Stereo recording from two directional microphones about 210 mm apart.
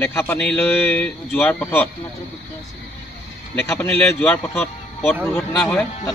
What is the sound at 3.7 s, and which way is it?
Speech, 10° left (ahead or behind).